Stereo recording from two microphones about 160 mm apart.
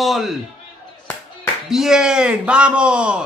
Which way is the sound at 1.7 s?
5° right (ahead or behind).